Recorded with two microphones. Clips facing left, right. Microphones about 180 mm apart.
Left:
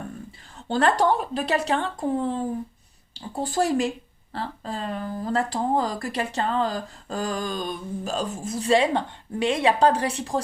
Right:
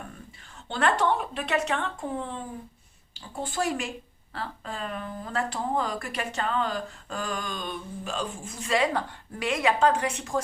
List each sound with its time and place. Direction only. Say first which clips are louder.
0.7 s speech: left 4 dB; 40° left (ahead or behind)